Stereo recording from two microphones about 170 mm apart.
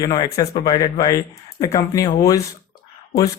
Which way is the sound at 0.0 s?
20° left (ahead or behind).